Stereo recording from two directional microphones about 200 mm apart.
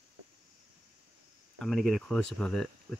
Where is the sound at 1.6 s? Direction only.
Centre (ahead or behind).